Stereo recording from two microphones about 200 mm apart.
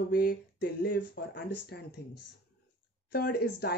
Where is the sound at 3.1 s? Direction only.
50° left (ahead or behind).